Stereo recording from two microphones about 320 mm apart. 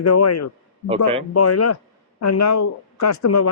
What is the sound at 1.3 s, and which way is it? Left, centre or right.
A man's voice, left.